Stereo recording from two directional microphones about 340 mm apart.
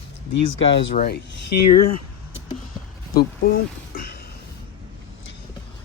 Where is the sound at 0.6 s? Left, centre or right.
Left.